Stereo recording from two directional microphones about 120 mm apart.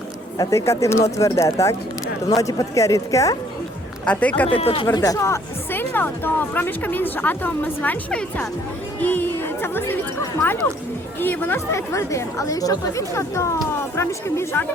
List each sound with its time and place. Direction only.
0.3 s a woman's voice: 25° left (ahead or behind)
4.0 s speech: 10° left (ahead or behind)
4.4 s speech: 50° left (ahead or behind)
4.9 s a woman's voice: 25° left (ahead or behind)